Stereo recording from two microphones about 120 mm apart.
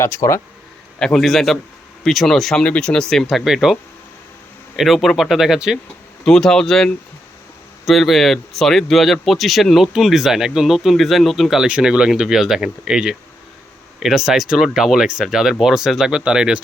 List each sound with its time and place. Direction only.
0.0 s speech: 25° left (ahead or behind)
0.9 s speech: 5° left (ahead or behind)
4.8 s speech: centre (ahead or behind)